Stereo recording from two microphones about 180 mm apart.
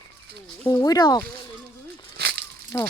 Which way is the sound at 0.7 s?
20° left (ahead or behind).